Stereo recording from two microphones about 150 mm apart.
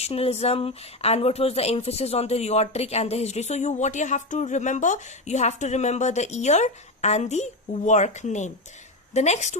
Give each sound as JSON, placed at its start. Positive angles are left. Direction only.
{"t": 0.0, "sound": "speech", "side_deg": 40}